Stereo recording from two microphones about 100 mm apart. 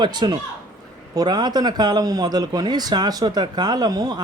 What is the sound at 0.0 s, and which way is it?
Speech, 45° right (ahead or behind).